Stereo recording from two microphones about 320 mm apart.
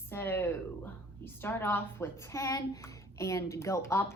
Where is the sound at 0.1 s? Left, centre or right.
Centre.